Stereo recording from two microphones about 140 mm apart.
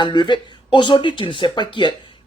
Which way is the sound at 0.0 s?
35° left (ahead or behind).